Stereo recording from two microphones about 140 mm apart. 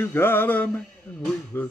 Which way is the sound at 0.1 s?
15° left (ahead or behind).